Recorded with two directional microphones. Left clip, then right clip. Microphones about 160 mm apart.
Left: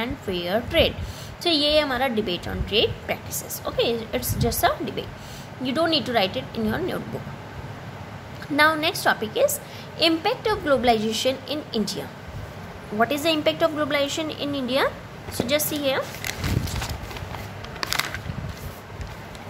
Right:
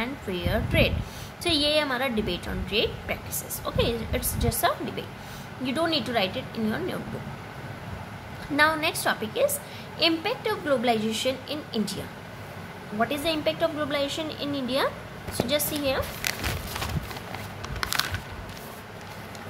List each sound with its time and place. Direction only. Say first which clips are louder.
0.0 s a woman's voice: left 3 dB; 15° left (ahead or behind)
8.5 s a woman's voice: left 3 dB; 20° left (ahead or behind)
13.0 s a woman's voice: left 5 dB; 30° left (ahead or behind)